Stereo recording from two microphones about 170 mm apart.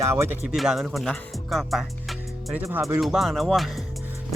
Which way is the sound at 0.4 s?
Centre (ahead or behind).